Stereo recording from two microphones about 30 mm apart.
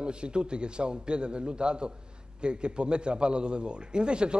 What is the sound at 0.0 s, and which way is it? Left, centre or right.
A man's voice, right.